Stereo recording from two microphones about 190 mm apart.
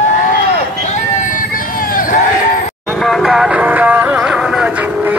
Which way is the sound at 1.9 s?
45° left (ahead or behind).